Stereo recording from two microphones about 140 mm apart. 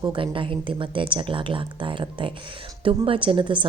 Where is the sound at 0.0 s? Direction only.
35° right (ahead or behind).